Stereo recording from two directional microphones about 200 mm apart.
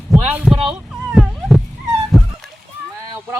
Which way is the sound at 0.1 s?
10° right (ahead or behind).